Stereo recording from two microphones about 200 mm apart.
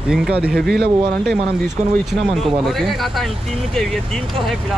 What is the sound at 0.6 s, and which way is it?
Speech, 55° right (ahead or behind).